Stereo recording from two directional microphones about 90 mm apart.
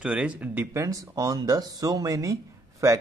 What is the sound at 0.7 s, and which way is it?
Speech, 35° right (ahead or behind).